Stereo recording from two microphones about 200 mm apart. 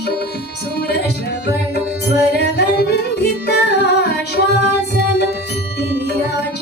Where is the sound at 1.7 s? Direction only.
55° left (ahead or behind).